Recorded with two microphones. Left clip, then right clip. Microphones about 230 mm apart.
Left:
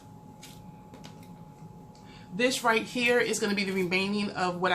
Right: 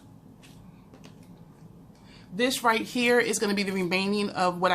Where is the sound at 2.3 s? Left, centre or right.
Right.